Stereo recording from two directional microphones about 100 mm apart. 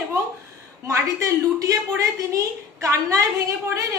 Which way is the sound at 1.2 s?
35° right (ahead or behind).